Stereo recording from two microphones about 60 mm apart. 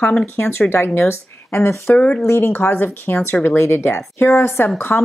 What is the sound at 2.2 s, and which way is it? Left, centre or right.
Speech, left.